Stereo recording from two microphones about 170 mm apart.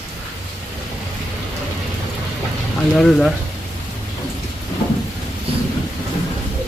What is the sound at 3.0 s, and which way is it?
Speech, centre (ahead or behind).